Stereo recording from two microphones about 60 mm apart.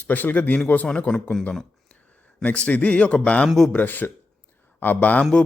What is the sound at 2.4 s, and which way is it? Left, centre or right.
A man's voice, left.